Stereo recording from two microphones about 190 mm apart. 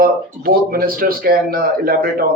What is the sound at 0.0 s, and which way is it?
Speech, 50° right (ahead or behind).